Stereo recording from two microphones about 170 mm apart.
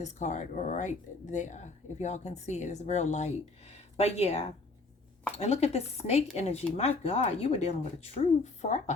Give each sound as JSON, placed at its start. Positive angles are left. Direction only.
{"t": 0.0, "sound": "speech", "side_deg": 45}